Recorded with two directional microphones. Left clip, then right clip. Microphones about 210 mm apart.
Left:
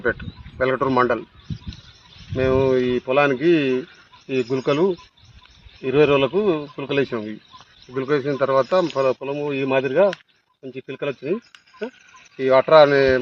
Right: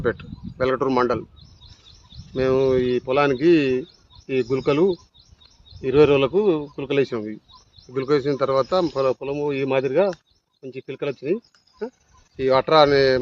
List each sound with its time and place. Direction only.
0.0 s speech: 25° right (ahead or behind)
2.3 s speech: 25° right (ahead or behind)
12.4 s speech: 25° right (ahead or behind)